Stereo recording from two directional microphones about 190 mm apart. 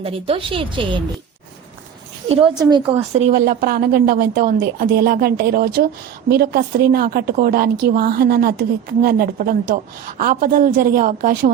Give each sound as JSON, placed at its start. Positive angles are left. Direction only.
{"t": 0.0, "sound": "a woman's voice", "side_deg": -30}
{"t": 2.3, "sound": "a woman's voice", "side_deg": -25}
{"t": 3.3, "sound": "a woman's voice", "side_deg": -50}